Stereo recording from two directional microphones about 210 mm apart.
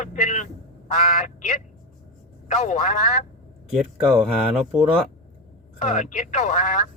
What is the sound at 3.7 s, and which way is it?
Speech, centre (ahead or behind).